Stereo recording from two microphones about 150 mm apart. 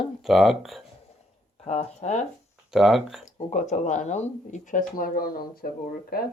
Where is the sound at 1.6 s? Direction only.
45° left (ahead or behind).